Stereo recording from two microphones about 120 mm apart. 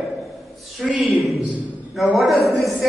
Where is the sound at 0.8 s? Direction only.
Centre (ahead or behind).